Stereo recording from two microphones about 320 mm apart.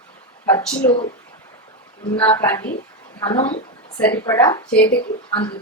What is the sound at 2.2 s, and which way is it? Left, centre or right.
Speech, centre.